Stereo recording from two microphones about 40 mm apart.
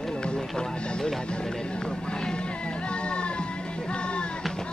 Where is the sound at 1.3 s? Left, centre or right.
Left.